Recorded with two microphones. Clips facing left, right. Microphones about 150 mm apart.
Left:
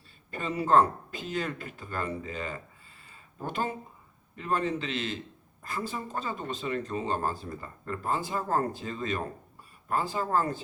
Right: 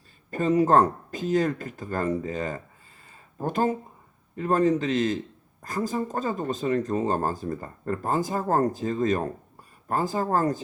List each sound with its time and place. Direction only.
0.3 s speech: 40° right (ahead or behind)
3.1 s a sound: 45° right (ahead or behind)
4.4 s speech: 45° right (ahead or behind)